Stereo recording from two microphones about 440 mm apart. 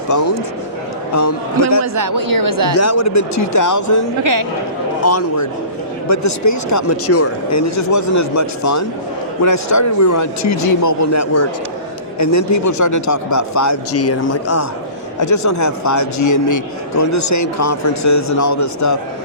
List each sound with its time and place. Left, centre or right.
1.8 s speech: right
2.7 s a man's voice: left
4.2 s speech: right
5.0 s a man's voice: left